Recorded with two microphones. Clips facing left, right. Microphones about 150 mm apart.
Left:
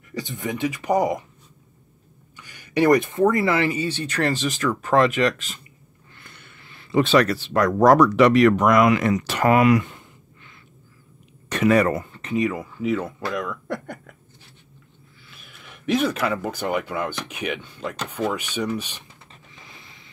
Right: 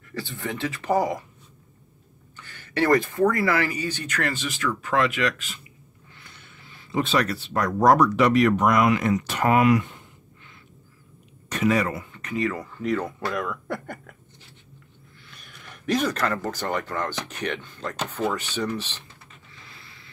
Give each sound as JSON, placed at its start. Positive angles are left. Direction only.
{"t": 0.1, "sound": "speech", "side_deg": 15}
{"t": 2.3, "sound": "speech", "side_deg": 15}
{"t": 6.1, "sound": "speech", "side_deg": 55}
{"t": 11.4, "sound": "speech", "side_deg": 65}
{"t": 12.1, "sound": "speech", "side_deg": 25}
{"t": 15.2, "sound": "speech", "side_deg": 5}